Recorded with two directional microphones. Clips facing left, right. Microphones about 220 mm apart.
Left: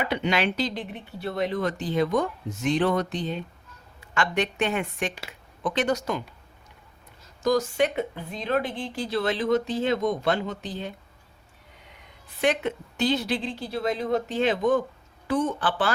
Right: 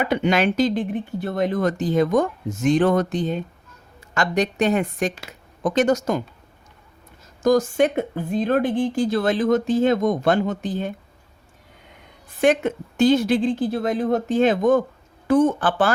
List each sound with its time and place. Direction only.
0.0 s speech: 45° right (ahead or behind)
7.4 s speech: 50° right (ahead or behind)
12.4 s speech: 45° right (ahead or behind)